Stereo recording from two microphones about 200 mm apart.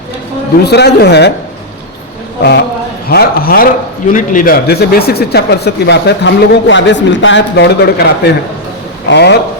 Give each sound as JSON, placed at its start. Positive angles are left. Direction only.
{"t": 0.6, "sound": "speech", "side_deg": 55}
{"t": 3.1, "sound": "a man's voice", "side_deg": 50}